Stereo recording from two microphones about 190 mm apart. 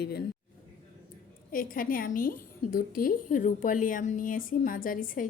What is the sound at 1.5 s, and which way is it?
A woman's voice, 50° left (ahead or behind).